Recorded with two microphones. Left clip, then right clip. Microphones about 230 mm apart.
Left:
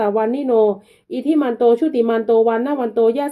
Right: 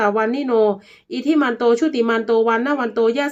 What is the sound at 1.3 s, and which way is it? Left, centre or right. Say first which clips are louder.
A woman's voice: left 2 dB; right.